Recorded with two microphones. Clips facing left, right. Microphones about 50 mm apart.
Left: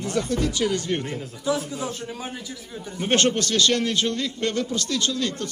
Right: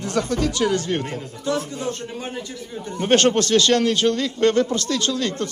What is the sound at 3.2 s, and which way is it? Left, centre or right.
A man's voice, right.